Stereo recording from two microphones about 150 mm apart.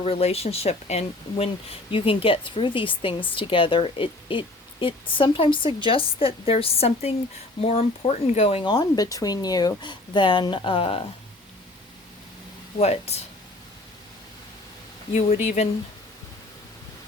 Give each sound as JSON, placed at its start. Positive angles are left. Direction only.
{"t": 0.0, "sound": "a woman's voice", "side_deg": 45}
{"t": 12.8, "sound": "speech", "side_deg": 45}
{"t": 15.1, "sound": "speech", "side_deg": 50}